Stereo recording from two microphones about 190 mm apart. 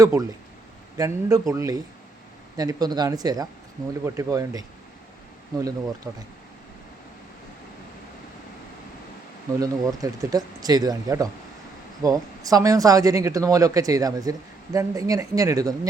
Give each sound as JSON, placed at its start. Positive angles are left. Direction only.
{"t": 0.0, "sound": "speech", "side_deg": -20}
{"t": 9.6, "sound": "speech", "side_deg": -20}